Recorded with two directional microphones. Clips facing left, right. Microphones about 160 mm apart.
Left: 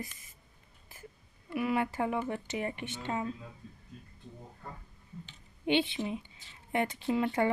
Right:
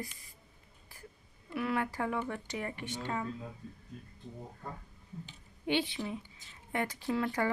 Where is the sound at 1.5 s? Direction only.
15° left (ahead or behind).